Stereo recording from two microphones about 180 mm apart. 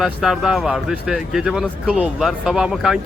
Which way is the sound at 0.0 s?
5° right (ahead or behind).